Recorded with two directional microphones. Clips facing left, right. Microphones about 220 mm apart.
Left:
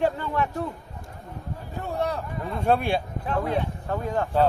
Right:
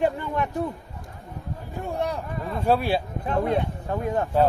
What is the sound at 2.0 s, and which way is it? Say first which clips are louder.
A man's voice: left 1 dB; 15° right (ahead or behind).